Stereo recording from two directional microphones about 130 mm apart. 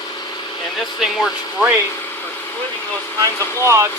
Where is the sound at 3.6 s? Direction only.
20° right (ahead or behind).